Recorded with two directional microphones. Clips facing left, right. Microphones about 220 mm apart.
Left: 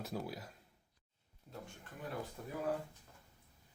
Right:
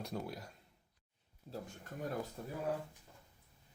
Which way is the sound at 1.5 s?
30° right (ahead or behind).